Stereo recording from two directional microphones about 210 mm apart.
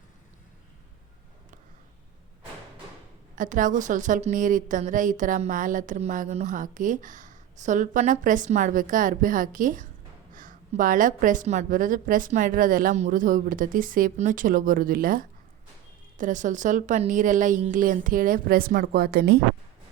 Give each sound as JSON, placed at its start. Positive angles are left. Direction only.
{"t": 3.3, "sound": "a woman's voice", "side_deg": -40}